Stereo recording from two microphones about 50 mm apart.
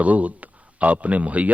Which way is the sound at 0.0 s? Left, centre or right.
Right.